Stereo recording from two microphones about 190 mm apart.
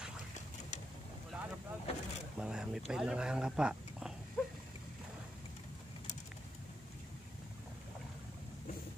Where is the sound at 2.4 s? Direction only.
5° right (ahead or behind).